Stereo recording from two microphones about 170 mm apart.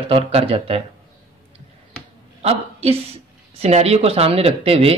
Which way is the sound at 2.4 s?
35° right (ahead or behind).